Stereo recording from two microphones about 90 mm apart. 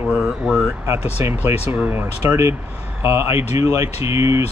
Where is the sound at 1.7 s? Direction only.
25° right (ahead or behind).